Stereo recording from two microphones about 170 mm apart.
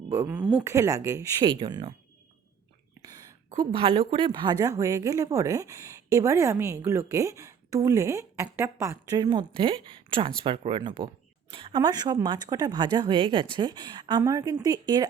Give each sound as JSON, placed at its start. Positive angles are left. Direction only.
{"t": 0.1, "sound": "speech", "side_deg": -10}
{"t": 0.7, "sound": "speech", "side_deg": -20}
{"t": 3.6, "sound": "speech", "side_deg": -30}